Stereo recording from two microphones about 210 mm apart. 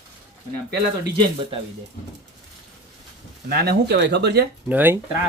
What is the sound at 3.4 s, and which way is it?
Speech, 50° right (ahead or behind).